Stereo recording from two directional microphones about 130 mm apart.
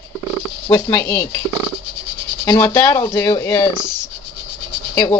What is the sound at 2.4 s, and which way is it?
Speech, 20° left (ahead or behind).